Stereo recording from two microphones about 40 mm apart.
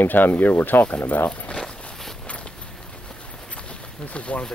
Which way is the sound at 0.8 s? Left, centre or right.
Left.